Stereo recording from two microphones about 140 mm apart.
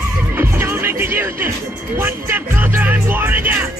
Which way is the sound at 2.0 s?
15° right (ahead or behind).